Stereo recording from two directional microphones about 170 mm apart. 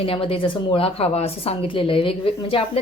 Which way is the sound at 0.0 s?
35° left (ahead or behind).